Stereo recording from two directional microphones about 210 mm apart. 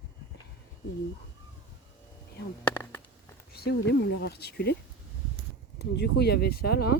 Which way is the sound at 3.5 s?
50° left (ahead or behind).